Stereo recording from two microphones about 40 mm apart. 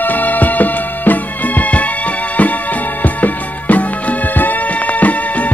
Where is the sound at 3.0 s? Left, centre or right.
Left.